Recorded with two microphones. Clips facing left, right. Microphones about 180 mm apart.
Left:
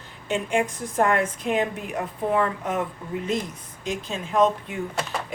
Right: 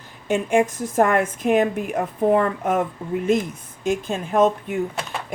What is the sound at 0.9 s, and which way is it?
Speech, 45° right (ahead or behind).